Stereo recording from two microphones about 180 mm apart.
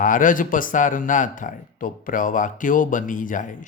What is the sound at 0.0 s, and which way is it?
A man's voice, 45° left (ahead or behind).